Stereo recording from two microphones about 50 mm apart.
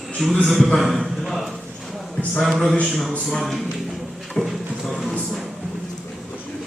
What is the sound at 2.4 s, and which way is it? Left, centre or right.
Speech, centre.